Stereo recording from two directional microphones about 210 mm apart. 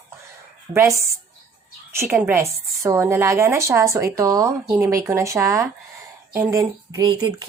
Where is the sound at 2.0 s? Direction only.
10° right (ahead or behind).